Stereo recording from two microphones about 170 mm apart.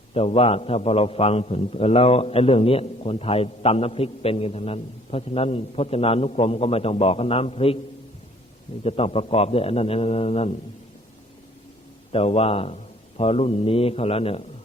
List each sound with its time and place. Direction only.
0.1 s a man's voice: 35° left (ahead or behind)
8.8 s a man's voice: 35° left (ahead or behind)
12.1 s a man's voice: 35° left (ahead or behind)